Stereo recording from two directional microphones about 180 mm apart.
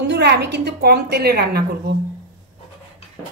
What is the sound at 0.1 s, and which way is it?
A woman's voice, 70° right (ahead or behind).